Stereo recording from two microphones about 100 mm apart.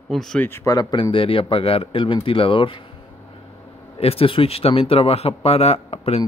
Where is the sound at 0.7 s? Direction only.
40° left (ahead or behind).